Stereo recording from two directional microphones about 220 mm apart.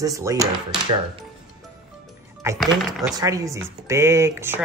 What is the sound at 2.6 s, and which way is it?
Speech, centre (ahead or behind).